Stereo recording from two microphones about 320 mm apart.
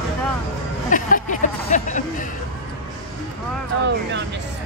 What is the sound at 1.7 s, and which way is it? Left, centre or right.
Music, left.